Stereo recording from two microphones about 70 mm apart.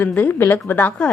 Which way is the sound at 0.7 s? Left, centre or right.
Left.